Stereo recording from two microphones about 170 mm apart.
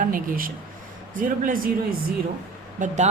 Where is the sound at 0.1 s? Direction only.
55° right (ahead or behind).